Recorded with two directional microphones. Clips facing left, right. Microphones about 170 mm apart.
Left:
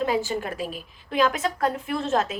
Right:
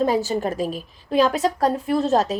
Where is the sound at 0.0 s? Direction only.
40° right (ahead or behind).